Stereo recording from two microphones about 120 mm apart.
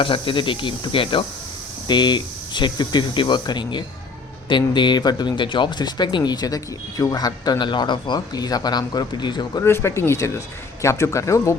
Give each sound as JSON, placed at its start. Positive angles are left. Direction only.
{"t": 0.0, "sound": "speech", "side_deg": 45}
{"t": 9.6, "sound": "speech", "side_deg": 20}